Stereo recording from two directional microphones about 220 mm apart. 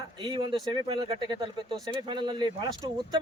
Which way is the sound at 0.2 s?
20° right (ahead or behind).